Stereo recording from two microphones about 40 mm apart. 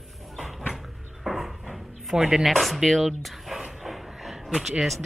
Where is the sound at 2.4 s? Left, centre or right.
Centre.